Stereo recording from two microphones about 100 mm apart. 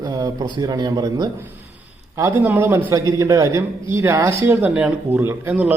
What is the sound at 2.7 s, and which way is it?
A man's voice, 35° right (ahead or behind).